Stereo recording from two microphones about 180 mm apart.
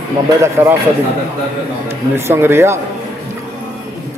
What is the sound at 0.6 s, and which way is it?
Speech, 15° right (ahead or behind).